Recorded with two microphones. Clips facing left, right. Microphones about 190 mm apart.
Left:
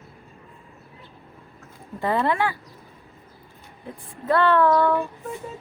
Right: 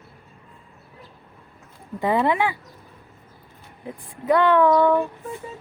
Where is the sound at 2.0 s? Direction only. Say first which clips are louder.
Right 2 dB; 15° right (ahead or behind).